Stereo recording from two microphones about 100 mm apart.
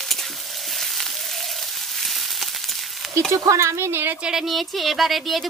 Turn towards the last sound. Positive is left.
turn(degrees=0)  # may be behind; listen again after turning